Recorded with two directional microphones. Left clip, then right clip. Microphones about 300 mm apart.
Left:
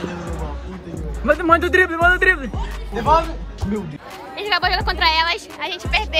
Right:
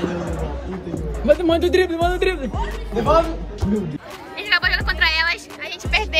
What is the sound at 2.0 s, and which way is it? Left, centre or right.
Speech, centre.